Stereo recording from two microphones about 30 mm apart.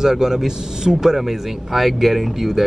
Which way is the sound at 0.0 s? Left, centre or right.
Centre.